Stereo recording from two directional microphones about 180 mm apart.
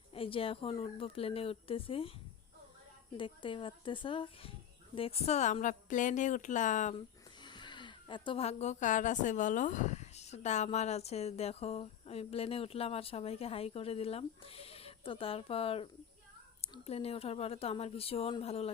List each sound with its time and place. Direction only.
0.1 s a woman's voice: 30° left (ahead or behind)
3.2 s a woman's voice: 30° left (ahead or behind)
7.4 s a woman's voice: 25° left (ahead or behind)